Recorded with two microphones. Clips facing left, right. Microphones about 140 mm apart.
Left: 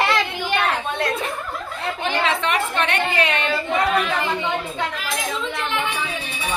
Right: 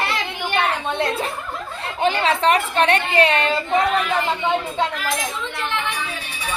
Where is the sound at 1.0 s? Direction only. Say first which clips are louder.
Right 1 dB; 25° right (ahead or behind).